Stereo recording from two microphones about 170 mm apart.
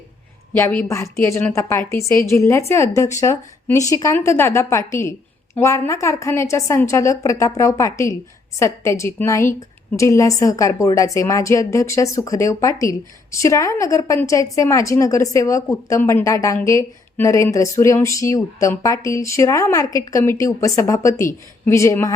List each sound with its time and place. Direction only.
0.5 s a woman's voice: 10° left (ahead or behind)